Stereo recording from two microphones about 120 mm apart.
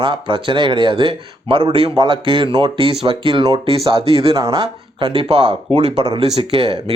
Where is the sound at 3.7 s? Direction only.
50° right (ahead or behind).